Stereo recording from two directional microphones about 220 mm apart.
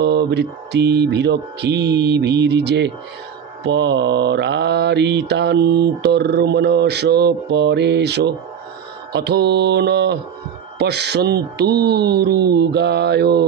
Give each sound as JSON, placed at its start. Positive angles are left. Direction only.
{"t": 0.0, "sound": "mantra", "side_deg": -50}